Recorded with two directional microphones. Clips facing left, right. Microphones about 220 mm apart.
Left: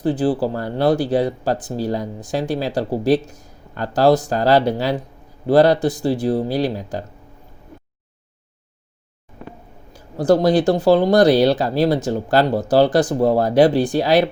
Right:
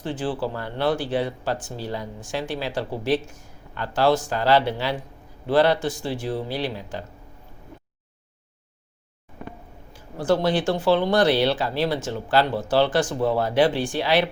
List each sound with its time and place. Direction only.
0.0 s speech: 40° left (ahead or behind)
9.9 s speech: 40° left (ahead or behind)